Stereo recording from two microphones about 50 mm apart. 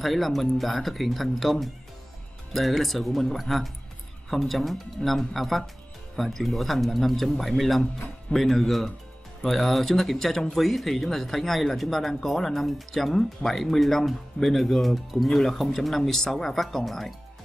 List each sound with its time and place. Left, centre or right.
0.0 s speech: centre